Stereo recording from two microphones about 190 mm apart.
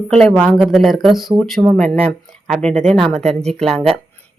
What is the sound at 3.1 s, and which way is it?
Speech, 35° right (ahead or behind).